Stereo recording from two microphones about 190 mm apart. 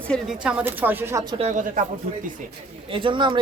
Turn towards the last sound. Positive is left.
turn(degrees=-25)  # may be behind; listen again after turning